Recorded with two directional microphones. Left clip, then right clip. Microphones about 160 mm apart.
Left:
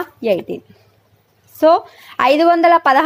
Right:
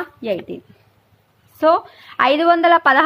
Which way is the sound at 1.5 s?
30° left (ahead or behind).